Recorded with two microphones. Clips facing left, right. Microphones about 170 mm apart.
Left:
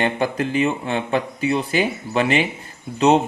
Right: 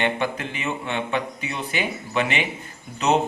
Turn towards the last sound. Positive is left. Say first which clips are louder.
# left 5 dB
turn(degrees=30)  # may be behind; listen again after turning